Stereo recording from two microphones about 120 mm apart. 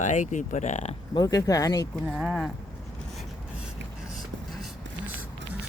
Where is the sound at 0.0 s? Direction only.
90° left.